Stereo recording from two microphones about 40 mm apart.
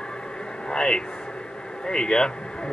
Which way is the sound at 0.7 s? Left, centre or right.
Centre.